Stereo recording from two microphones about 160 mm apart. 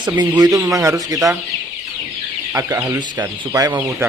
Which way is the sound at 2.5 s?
15° right (ahead or behind).